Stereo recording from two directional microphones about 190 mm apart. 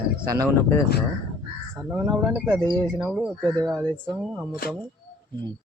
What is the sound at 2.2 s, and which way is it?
Speech, 10° right (ahead or behind).